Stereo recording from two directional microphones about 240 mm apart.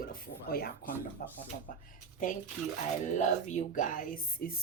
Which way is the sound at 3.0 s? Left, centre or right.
Left.